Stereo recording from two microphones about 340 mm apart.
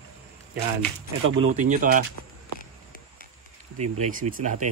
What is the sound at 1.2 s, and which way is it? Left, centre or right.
Speech, right.